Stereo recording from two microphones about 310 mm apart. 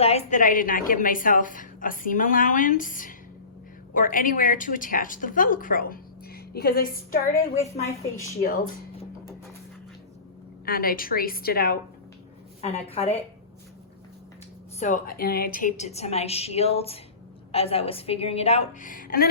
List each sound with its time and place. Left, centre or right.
0.0 s a woman's voice: left
7.3 s a woman's voice: centre
8.4 s a woman's voice: left
10.7 s a woman's voice: left
12.9 s a woman's voice: centre
14.8 s a woman's voice: left